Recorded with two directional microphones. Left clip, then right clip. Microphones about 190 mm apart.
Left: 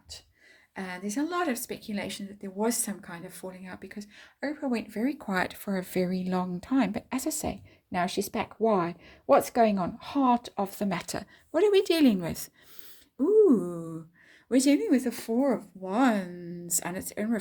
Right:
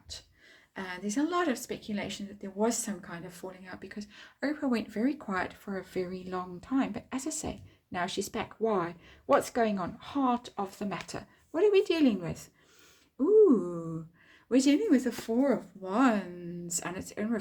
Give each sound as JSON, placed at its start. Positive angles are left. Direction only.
{"t": 0.8, "sound": "speech", "side_deg": 30}
{"t": 4.4, "sound": "speech", "side_deg": 5}
{"t": 5.3, "sound": "speech", "side_deg": 40}
{"t": 13.1, "sound": "speech", "side_deg": 30}